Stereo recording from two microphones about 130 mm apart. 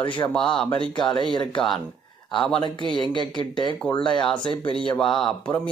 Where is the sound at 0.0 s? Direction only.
40° left (ahead or behind).